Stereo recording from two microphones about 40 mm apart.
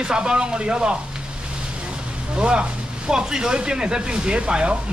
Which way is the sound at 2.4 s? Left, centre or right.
Right.